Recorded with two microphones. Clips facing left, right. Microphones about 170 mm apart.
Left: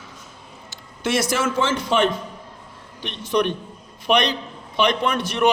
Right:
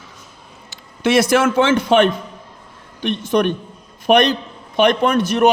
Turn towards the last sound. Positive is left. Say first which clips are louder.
# right 6 dB
turn(degrees=-45)  # may be behind; listen again after turning